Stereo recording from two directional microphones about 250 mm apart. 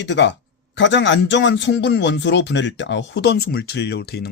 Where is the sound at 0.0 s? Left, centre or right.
Left.